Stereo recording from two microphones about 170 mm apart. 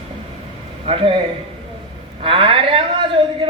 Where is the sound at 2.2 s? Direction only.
30° right (ahead or behind).